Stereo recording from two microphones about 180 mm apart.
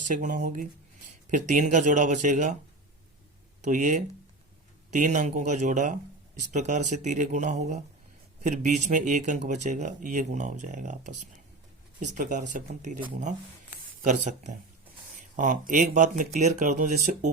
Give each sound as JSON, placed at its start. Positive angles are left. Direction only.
{"t": 0.1, "sound": "speech", "side_deg": -45}
{"t": 3.6, "sound": "speech", "side_deg": -45}